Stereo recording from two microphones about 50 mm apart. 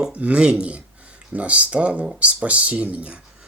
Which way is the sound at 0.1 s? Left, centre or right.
Right.